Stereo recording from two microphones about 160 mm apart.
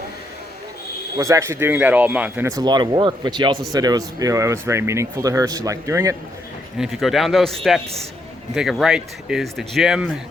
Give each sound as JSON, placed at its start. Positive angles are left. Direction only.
{"t": 1.2, "sound": "speech", "side_deg": -20}
{"t": 2.5, "sound": "speech", "side_deg": -25}
{"t": 6.7, "sound": "speech", "side_deg": 0}